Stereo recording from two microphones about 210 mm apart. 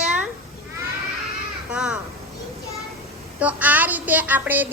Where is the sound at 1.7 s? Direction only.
5° right (ahead or behind).